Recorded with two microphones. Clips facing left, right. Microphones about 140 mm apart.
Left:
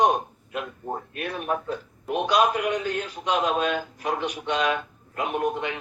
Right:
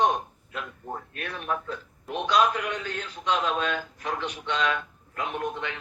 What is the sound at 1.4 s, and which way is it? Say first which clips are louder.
Speech: left 3 dB; 25° left (ahead or behind).